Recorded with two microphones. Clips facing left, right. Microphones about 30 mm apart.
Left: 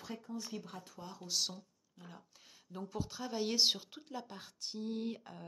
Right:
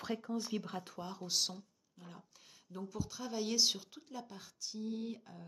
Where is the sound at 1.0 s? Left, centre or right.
Centre.